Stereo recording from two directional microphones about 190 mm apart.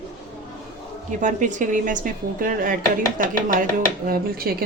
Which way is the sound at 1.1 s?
40° right (ahead or behind).